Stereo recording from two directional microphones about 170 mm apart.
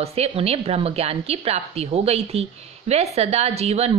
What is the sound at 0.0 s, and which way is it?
A woman's voice, 35° right (ahead or behind).